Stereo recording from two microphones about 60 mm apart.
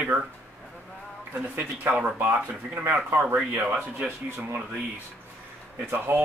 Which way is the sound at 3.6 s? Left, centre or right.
Centre.